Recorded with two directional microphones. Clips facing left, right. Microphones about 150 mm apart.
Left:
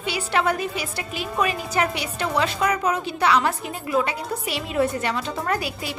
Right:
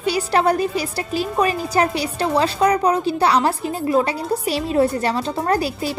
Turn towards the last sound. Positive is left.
turn(degrees=-35)  # may be behind; listen again after turning